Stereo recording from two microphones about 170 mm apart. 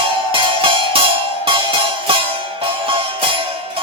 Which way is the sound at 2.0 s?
30° right (ahead or behind).